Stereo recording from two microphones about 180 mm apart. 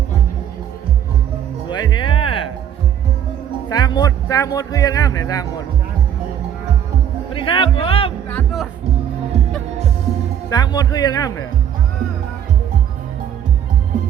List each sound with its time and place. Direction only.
1.7 s music: 25° left (ahead or behind)
3.7 s a man's voice: 20° left (ahead or behind)
7.3 s speech: 30° left (ahead or behind)
8.3 s music: 5° left (ahead or behind)
10.5 s speech: 20° left (ahead or behind)